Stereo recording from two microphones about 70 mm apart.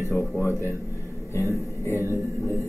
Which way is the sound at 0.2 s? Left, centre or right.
Left.